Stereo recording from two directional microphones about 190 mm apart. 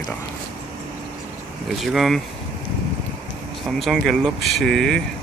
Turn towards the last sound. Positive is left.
turn(degrees=0)  # may be behind; listen again after turning